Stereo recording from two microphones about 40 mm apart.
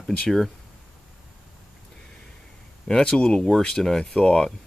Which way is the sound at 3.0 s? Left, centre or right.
Left.